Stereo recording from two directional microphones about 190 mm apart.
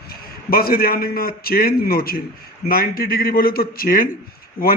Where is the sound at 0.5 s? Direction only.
50° left (ahead or behind).